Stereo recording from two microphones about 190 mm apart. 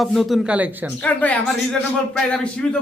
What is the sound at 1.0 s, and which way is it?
A man's voice, 10° left (ahead or behind).